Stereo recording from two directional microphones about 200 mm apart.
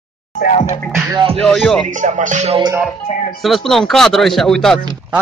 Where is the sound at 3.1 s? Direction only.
35° left (ahead or behind).